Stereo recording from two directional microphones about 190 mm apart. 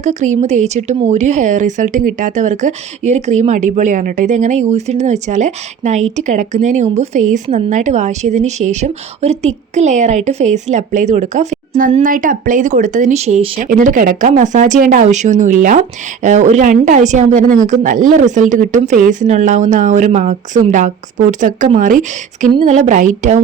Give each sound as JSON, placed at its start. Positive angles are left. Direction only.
{"t": 0.0, "sound": "speech", "side_deg": -40}